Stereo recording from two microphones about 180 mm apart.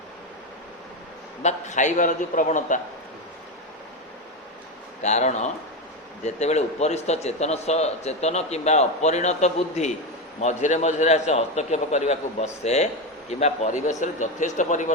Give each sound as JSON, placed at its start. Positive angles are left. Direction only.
{"t": 1.4, "sound": "a man's voice", "side_deg": 40}
{"t": 5.0, "sound": "a man's voice", "side_deg": 40}